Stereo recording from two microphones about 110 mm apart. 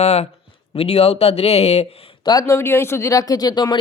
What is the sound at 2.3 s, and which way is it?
Speech, 40° left (ahead or behind).